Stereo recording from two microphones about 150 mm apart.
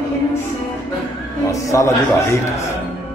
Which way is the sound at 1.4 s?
20° left (ahead or behind).